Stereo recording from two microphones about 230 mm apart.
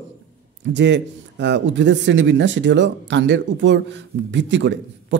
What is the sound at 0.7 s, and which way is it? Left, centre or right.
Speech, right.